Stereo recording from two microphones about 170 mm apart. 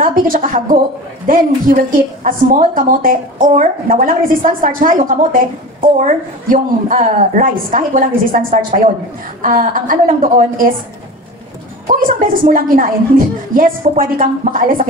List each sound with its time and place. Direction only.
0.0 s a woman's voice: 55° right (ahead or behind)
11.9 s a woman's voice: 55° right (ahead or behind)